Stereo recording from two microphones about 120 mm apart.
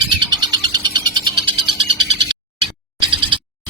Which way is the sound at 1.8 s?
85° left.